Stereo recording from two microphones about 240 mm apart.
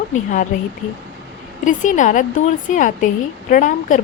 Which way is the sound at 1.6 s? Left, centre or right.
Left.